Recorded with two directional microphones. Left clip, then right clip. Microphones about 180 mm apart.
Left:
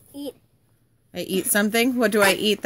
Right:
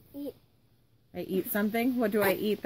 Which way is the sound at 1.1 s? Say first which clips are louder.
Left 8 dB; 50° left (ahead or behind).